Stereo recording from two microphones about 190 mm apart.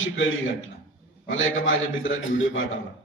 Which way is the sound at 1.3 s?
90° left.